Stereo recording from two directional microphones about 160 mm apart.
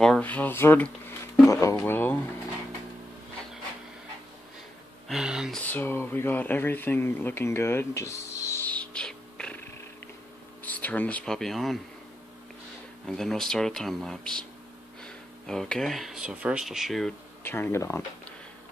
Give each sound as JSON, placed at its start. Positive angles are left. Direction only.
{"t": 0.0, "sound": "speech", "side_deg": 5}
{"t": 1.5, "sound": "speech", "side_deg": 20}
{"t": 5.0, "sound": "a sound", "side_deg": -5}
{"t": 5.6, "sound": "speech", "side_deg": 10}
{"t": 10.6, "sound": "speech", "side_deg": 10}
{"t": 13.0, "sound": "speech", "side_deg": 5}
{"t": 17.4, "sound": "speech", "side_deg": 15}